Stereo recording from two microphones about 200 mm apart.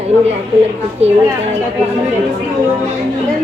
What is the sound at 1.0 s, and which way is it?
Speech, 30° right (ahead or behind).